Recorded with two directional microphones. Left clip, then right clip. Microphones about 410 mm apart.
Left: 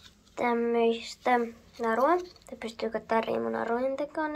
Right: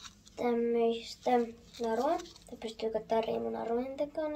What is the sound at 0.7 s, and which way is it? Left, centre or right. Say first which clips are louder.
Speech: left 4 dB; centre.